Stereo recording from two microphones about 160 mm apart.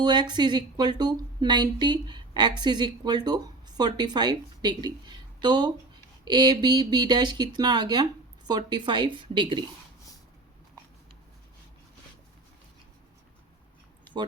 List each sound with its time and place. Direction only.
0.0 s speech: 25° right (ahead or behind)